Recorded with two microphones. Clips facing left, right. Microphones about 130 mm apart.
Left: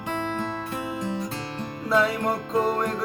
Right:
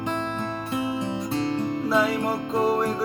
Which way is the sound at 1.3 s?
25° right (ahead or behind).